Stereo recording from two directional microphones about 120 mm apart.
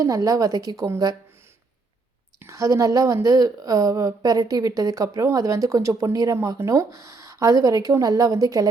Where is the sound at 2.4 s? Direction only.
25° right (ahead or behind).